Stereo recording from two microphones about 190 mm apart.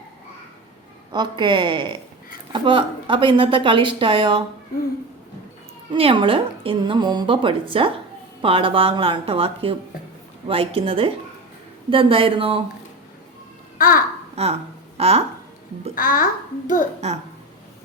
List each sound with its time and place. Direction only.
1.1 s a woman's voice: 25° right (ahead or behind)
5.9 s a woman's voice: 30° right (ahead or behind)
13.7 s a child's voice: 50° left (ahead or behind)
14.3 s speech: 35° right (ahead or behind)
16.0 s a child's voice: 45° left (ahead or behind)